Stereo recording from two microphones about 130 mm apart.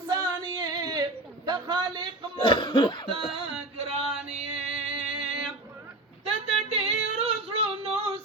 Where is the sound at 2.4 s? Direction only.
40° left (ahead or behind).